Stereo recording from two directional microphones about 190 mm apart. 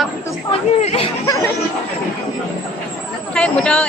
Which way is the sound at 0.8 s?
35° left (ahead or behind).